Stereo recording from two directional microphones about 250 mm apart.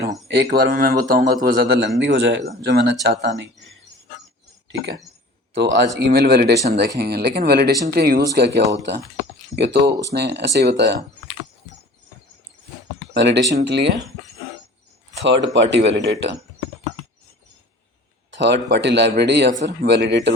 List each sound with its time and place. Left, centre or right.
0.3 s a man's voice: right
5.5 s a man's voice: right
13.1 s a man's voice: right
15.2 s a man's voice: right
18.3 s a man's voice: right